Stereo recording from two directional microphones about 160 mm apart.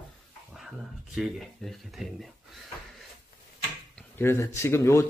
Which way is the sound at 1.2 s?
Centre (ahead or behind).